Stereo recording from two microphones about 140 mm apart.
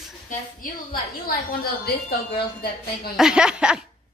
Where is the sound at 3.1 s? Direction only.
5° right (ahead or behind).